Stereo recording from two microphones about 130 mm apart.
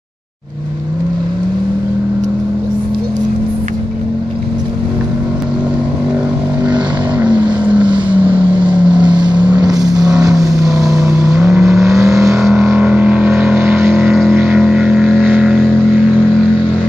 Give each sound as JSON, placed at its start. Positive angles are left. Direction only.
{"t": 7.4, "sound": "vehicle", "side_deg": -35}
{"t": 12.4, "sound": "vehicle", "side_deg": 0}